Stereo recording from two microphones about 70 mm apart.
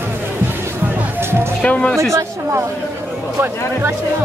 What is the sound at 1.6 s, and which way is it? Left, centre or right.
Speech, centre.